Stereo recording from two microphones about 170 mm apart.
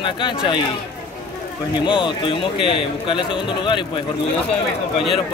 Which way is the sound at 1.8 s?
30° left (ahead or behind).